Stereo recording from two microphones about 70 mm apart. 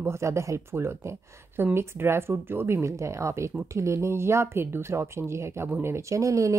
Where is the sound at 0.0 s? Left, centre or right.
Right.